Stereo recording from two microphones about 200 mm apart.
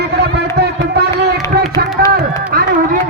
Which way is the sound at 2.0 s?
50° right (ahead or behind).